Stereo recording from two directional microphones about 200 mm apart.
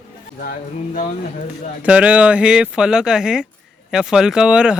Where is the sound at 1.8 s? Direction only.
5° right (ahead or behind).